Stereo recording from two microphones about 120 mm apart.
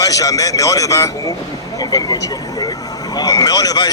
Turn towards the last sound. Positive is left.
turn(degrees=30)  # may be behind; listen again after turning